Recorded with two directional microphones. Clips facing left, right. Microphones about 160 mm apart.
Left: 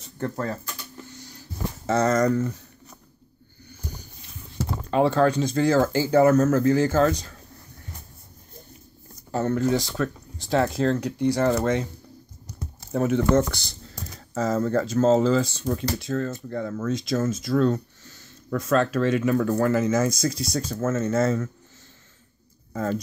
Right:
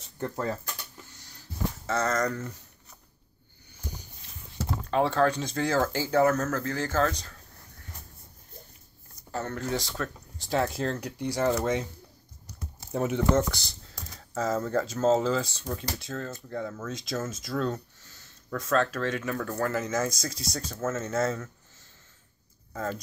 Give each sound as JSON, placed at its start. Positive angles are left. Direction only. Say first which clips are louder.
{"t": 1.9, "sound": "speech", "louder": "left 8 dB", "side_deg": 20}
{"t": 4.9, "sound": "speech", "louder": "left 4 dB", "side_deg": 5}
{"t": 9.3, "sound": "speech", "louder": "left 9 dB", "side_deg": 15}
{"t": 9.6, "sound": "speech", "louder": "left 8 dB", "side_deg": 5}
{"t": 12.8, "sound": "speech", "louder": "left 4 dB", "side_deg": -15}
{"t": 14.1, "sound": "speech", "louder": "left 4 dB", "side_deg": 0}
{"t": 22.7, "sound": "speech", "louder": "left 6 dB", "side_deg": 0}